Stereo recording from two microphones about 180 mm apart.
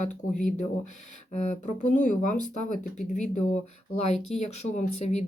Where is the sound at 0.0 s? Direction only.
40° left (ahead or behind).